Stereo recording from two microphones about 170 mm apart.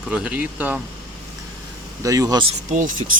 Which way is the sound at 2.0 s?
20° right (ahead or behind).